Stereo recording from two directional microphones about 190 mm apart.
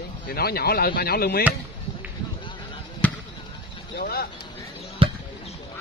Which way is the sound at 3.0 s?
5° left (ahead or behind).